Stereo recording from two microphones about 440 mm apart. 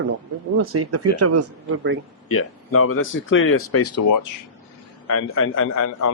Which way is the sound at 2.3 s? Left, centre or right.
Left.